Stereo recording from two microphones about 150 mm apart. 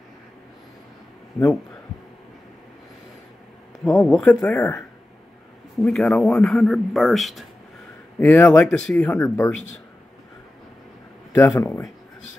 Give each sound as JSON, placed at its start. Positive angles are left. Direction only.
{"t": 3.8, "sound": "speech", "side_deg": 5}
{"t": 8.2, "sound": "speech", "side_deg": 10}
{"t": 11.3, "sound": "speech", "side_deg": 15}